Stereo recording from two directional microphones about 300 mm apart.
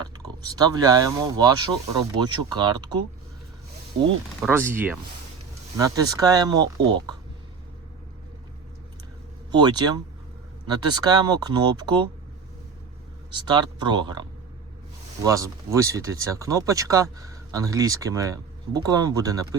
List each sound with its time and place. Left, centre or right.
0.0 s speech: centre
4.4 s speech: centre
9.5 s speech: centre
13.3 s speech: centre